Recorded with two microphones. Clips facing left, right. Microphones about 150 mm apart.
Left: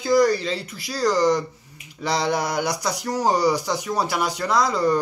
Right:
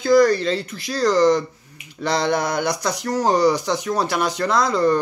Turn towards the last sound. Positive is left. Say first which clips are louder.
# right 2 dB
turn(degrees=10)  # may be behind; listen again after turning